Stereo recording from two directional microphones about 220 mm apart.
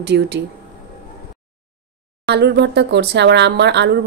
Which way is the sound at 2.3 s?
50° right (ahead or behind).